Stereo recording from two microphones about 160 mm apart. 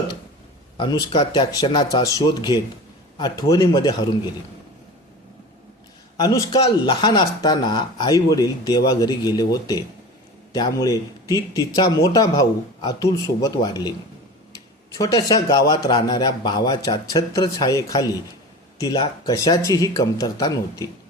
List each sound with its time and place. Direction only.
0.8 s speech: 25° left (ahead or behind)
6.1 s speech: 25° left (ahead or behind)
14.9 s speech: 25° left (ahead or behind)